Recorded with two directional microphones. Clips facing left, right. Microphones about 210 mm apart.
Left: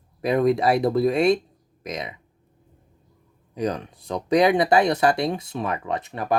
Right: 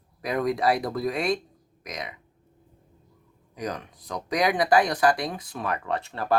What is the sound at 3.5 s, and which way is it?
Speech, 30° left (ahead or behind).